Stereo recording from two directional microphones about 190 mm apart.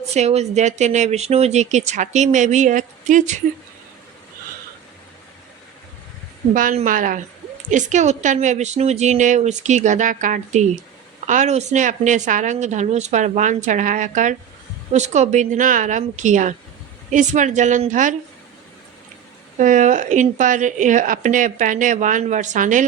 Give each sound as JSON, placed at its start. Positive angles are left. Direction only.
{"t": 0.1, "sound": "speech", "side_deg": -35}
{"t": 6.5, "sound": "a woman's voice", "side_deg": -45}
{"t": 19.5, "sound": "speech", "side_deg": -40}